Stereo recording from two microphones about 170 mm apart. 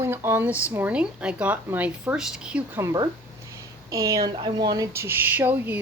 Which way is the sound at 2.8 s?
25° right (ahead or behind).